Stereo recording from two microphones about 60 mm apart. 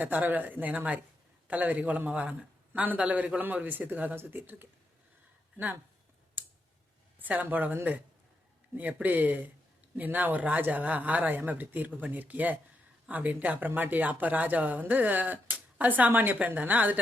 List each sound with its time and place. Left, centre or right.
0.0 s speech: right
6.4 s clicking: right
7.2 s speech: right